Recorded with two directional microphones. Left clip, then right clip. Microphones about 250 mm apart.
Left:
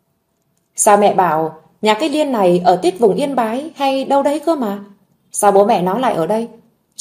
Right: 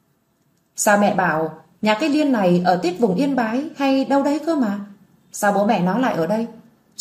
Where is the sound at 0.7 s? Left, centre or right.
Left.